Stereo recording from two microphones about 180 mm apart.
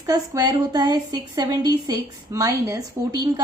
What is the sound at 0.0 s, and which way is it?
Speech, 20° right (ahead or behind).